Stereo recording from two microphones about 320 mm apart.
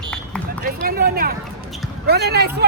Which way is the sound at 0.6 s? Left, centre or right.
Right.